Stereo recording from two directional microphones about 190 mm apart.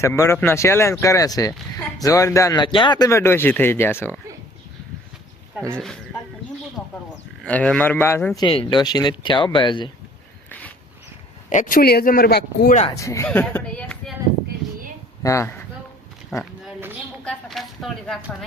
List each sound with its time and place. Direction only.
0.0 s speech: 15° left (ahead or behind)
5.7 s speech: 5° left (ahead or behind)
7.4 s speech: 5° left (ahead or behind)
8.4 s speech: 25° left (ahead or behind)
11.4 s speech: 40° left (ahead or behind); by 12.7 s 60° left (ahead or behind)
12.9 s speech: 15° left (ahead or behind)
15.2 s speech: 15° left (ahead or behind)
16.3 s a sound: centre (ahead or behind)
17.2 s speech: centre (ahead or behind)